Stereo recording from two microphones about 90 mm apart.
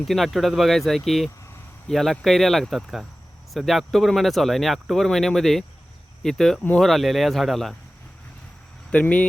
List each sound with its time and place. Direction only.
0.1 s speech: centre (ahead or behind)
8.9 s speech: 15° left (ahead or behind)